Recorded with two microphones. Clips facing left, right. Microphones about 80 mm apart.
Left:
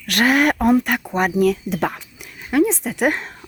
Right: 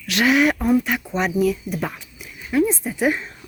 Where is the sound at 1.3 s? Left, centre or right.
Left.